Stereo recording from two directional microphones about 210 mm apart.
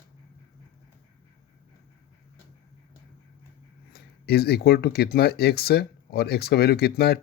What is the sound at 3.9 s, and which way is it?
Speech, 50° left (ahead or behind).